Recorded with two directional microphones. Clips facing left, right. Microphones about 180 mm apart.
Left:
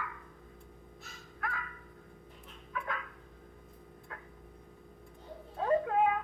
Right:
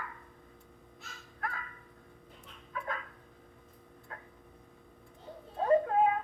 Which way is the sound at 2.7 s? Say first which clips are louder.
Even; 35° right (ahead or behind).